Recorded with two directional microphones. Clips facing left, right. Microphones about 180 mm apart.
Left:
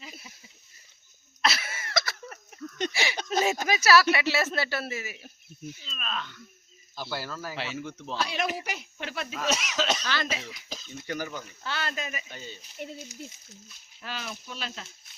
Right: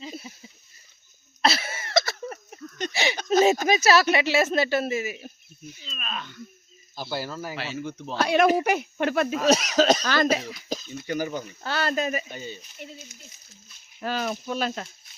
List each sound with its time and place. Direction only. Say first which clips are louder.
0.0 s a sound: right 9 dB; 30° right (ahead or behind)
1.4 s a sound: right 5 dB; 30° right (ahead or behind)
3.7 s speech: right 2 dB; 25° right (ahead or behind)
6.0 s speech: right 1 dB; 5° right (ahead or behind)
7.8 s speech: right 4 dB; 5° right (ahead or behind)
8.1 s speech: right 11 dB; 55° right (ahead or behind)
9.4 s speech: right 8 dB; 40° right (ahead or behind)
11.0 s speech: right 5 dB; 5° right (ahead or behind)
11.6 s speech: right 8 dB; 40° right (ahead or behind)
12.3 s speech: right 6 dB; 15° right (ahead or behind)
12.8 s speech: left 4 dB; 50° left (ahead or behind)
14.0 s speech: right 10 dB; 45° right (ahead or behind)